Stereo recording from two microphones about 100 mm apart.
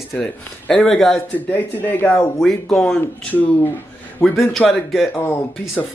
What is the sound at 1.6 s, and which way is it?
Speech, 15° left (ahead or behind).